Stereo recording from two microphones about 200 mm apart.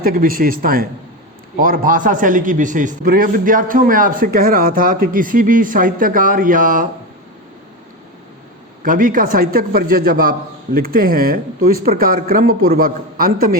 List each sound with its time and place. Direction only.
0.0 s a man's voice: 45° right (ahead or behind)
8.8 s a man's voice: 45° right (ahead or behind)